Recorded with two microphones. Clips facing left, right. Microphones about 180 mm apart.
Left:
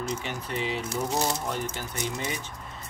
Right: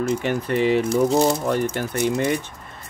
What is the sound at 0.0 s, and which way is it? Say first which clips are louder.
Speech: right 10 dB; 60° right (ahead or behind).